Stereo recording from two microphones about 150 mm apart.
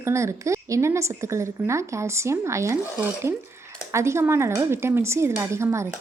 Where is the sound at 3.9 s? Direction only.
20° right (ahead or behind).